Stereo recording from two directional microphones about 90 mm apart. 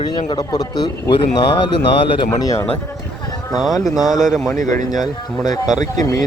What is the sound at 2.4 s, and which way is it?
Speech, 40° left (ahead or behind).